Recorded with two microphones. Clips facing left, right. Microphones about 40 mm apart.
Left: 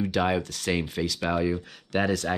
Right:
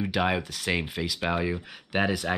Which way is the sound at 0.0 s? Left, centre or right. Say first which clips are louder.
Left 1 dB; centre.